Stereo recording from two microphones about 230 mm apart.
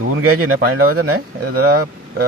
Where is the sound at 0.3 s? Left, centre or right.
Right.